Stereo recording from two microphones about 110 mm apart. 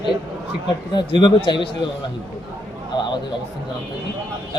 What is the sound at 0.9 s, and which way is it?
Speech, 40° left (ahead or behind).